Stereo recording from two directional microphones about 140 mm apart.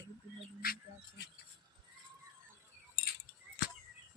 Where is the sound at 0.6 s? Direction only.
90° left.